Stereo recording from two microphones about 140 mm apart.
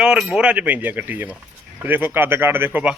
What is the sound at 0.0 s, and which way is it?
Speech, 5° right (ahead or behind).